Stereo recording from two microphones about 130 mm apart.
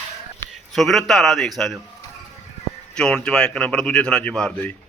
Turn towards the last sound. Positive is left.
turn(degrees=10)  # may be behind; listen again after turning